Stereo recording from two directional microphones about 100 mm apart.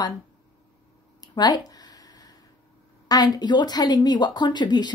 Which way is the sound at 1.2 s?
45° left (ahead or behind).